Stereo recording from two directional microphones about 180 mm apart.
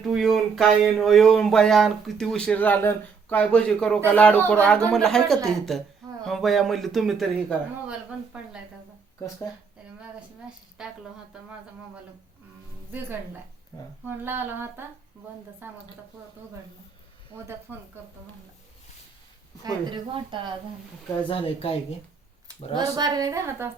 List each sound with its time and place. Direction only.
0.0 s speech: centre (ahead or behind)
10.8 s speech: 5° right (ahead or behind)
13.7 s speech: 20° left (ahead or behind)
14.3 s a woman's voice: 10° right (ahead or behind)
17.7 s a woman's voice: 10° right (ahead or behind)
19.6 s a woman's voice: 25° right (ahead or behind)
21.2 s speech: 30° left (ahead or behind)
22.8 s a woman's voice: 20° right (ahead or behind)